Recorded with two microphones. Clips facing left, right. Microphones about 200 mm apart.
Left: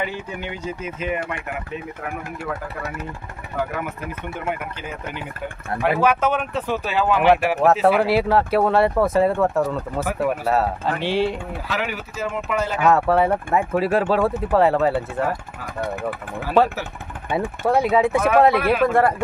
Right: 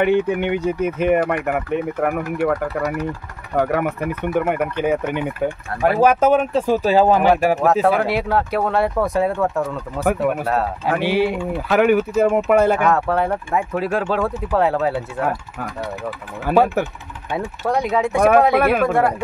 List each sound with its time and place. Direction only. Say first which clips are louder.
0.0 s speech: right 11 dB; 60° right (ahead or behind)
5.9 s speech: right 5 dB; 40° right (ahead or behind)
7.6 s speech: even; centre (ahead or behind)
11.0 s speech: right 3 dB; 10° right (ahead or behind)
11.3 s speech: right 9 dB; 55° right (ahead or behind)
12.8 s speech: left 1 dB; 5° left (ahead or behind)
16.6 s speech: right 1 dB; 10° right (ahead or behind)
17.6 s speech: left 2 dB; 5° left (ahead or behind)
18.5 s speech: right 3 dB; 55° right (ahead or behind)
18.8 s speech: even; centre (ahead or behind)